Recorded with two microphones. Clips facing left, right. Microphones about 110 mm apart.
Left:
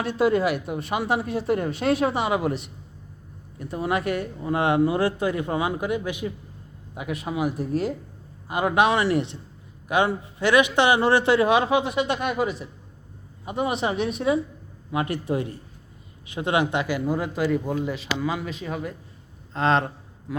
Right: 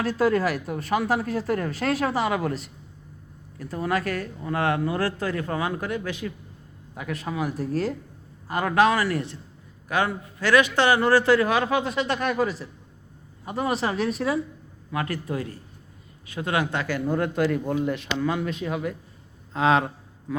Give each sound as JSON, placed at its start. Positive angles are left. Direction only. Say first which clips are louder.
{"t": 0.0, "sound": "a man's voice", "louder": "left 1 dB", "side_deg": 20}
{"t": 3.8, "sound": "a man's voice", "louder": "left 1 dB", "side_deg": 20}